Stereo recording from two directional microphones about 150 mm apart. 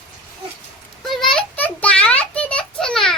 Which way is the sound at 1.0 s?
Centre (ahead or behind).